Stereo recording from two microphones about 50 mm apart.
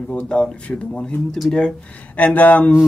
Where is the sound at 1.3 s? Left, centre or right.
Centre.